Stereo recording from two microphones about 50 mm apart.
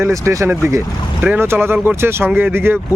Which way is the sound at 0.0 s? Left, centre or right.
Right.